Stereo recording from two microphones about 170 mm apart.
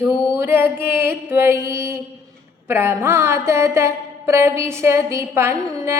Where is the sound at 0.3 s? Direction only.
10° right (ahead or behind).